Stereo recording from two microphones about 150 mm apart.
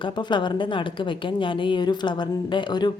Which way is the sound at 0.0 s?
30° left (ahead or behind).